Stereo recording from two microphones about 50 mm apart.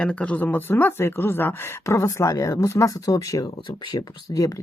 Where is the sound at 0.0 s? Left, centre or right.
Left.